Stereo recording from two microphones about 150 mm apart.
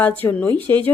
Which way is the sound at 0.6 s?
30° right (ahead or behind).